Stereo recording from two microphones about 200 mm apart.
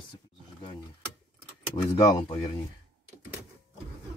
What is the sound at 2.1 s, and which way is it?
Speech, 25° left (ahead or behind).